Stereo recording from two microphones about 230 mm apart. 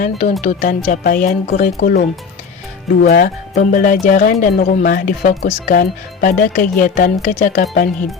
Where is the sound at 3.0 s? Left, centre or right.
Left.